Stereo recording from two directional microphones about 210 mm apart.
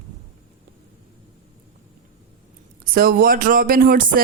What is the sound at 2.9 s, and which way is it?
A woman's voice, 45° right (ahead or behind).